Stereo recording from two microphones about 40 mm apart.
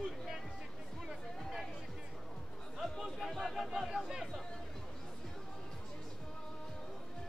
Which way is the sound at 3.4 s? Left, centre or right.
Centre.